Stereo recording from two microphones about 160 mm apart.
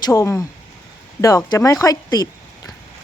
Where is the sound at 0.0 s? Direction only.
20° left (ahead or behind).